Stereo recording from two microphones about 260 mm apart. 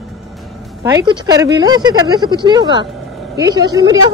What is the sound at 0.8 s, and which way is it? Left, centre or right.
Speech, centre.